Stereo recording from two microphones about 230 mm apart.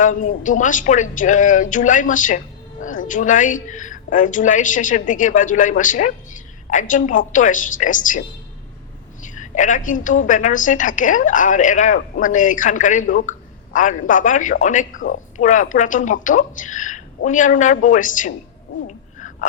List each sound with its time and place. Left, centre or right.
0.0 s a woman's voice: left
9.2 s a woman's voice: left
18.9 s owl: left